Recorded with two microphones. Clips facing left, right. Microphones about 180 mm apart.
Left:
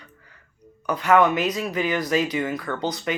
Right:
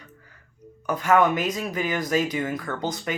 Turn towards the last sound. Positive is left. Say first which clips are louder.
# left 2 dB
turn(degrees=-45)  # may be behind; listen again after turning